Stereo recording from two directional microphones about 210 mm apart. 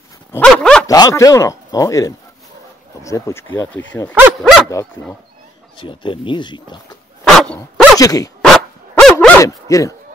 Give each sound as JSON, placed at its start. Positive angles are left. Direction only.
{"t": 0.3, "sound": "dog", "side_deg": 5}
{"t": 0.8, "sound": "speech", "side_deg": 15}
{"t": 4.1, "sound": "speech", "side_deg": -5}
{"t": 4.6, "sound": "speech", "side_deg": 15}
{"t": 7.2, "sound": "dog", "side_deg": 0}
{"t": 8.0, "sound": "speech", "side_deg": 15}
{"t": 8.4, "sound": "dog", "side_deg": 0}